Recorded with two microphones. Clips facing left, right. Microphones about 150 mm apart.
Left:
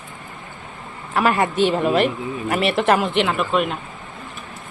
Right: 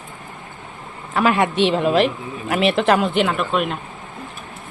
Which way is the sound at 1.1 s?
Centre (ahead or behind).